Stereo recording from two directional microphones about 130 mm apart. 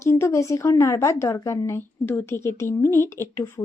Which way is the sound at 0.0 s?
20° left (ahead or behind).